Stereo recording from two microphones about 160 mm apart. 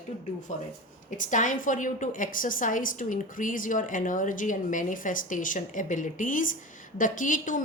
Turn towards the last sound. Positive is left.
turn(degrees=55)  # may be behind; listen again after turning